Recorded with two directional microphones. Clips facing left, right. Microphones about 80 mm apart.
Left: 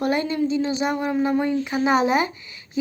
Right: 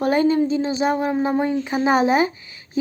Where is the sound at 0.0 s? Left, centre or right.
Right.